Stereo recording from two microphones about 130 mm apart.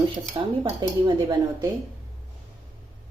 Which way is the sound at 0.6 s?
35° right (ahead or behind).